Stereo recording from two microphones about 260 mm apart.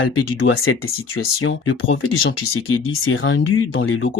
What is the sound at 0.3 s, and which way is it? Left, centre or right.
Speech, left.